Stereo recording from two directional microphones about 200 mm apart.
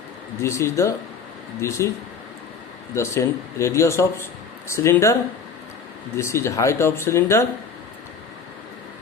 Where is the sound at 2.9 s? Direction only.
15° left (ahead or behind).